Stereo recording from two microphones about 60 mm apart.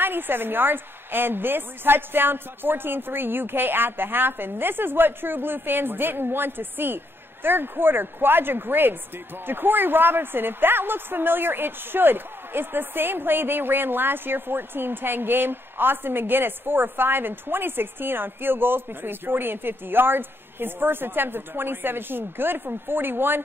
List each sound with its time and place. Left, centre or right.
0.0 s a woman's voice: right